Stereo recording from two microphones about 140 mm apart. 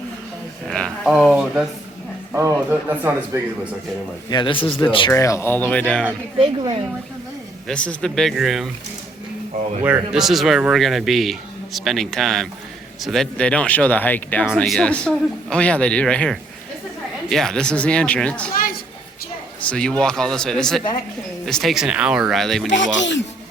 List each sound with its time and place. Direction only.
0.7 s a sound: 5° left (ahead or behind)
1.1 s speech: 5° right (ahead or behind)
2.3 s a man's voice: 20° right (ahead or behind)
4.3 s speech: 35° left (ahead or behind)
5.1 s speech: 20° left (ahead or behind)
6.4 s speech: 40° right (ahead or behind)
7.7 s speech: 5° left (ahead or behind)
9.8 s speech: 10° right (ahead or behind); by 18.5 s 10° left (ahead or behind)
19.6 s speech: 5° left (ahead or behind)